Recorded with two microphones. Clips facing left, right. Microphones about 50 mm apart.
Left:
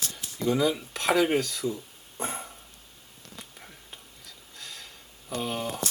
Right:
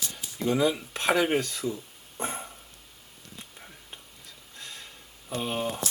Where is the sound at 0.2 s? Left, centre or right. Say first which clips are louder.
Even; left.